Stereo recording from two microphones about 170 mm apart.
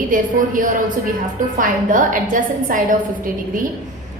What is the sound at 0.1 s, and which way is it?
A woman's voice, 50° right (ahead or behind).